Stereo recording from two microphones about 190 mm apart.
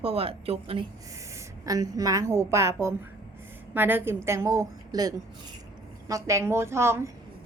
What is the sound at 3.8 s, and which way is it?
A woman's voice, 10° right (ahead or behind).